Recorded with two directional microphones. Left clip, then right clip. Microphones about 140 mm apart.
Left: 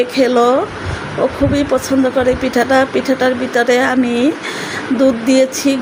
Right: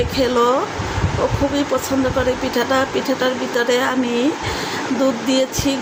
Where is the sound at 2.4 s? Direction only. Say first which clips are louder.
Left 5 dB; 40° left (ahead or behind).